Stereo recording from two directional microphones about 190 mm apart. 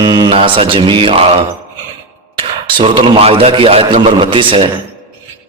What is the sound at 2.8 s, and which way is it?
A man's voice, 25° right (ahead or behind).